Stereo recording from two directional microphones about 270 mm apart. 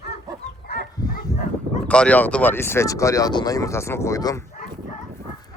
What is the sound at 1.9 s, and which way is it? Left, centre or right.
Speech, centre.